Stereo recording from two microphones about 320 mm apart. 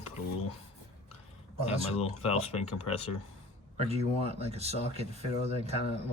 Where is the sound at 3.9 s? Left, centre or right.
Centre.